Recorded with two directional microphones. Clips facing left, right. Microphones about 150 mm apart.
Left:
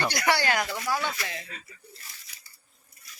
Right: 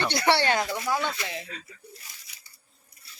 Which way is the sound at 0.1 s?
30° right (ahead or behind).